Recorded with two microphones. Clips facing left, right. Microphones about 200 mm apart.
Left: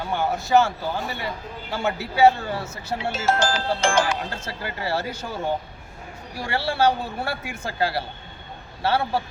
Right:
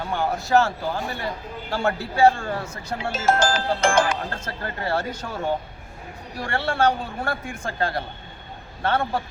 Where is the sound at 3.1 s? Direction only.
50° right (ahead or behind).